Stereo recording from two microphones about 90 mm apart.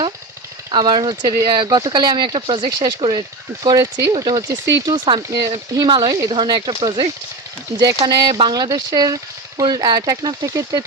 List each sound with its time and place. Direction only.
0.7 s speech: 55° right (ahead or behind)
2.6 s speech: 45° right (ahead or behind)
3.0 s speech: 55° right (ahead or behind)
4.4 s speech: 35° right (ahead or behind)
4.9 s speech: 55° right (ahead or behind)
6.3 s speech: 60° right (ahead or behind); by 10.8 s 40° right (ahead or behind)